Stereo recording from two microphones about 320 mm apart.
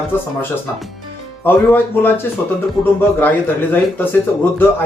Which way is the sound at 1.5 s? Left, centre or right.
Centre.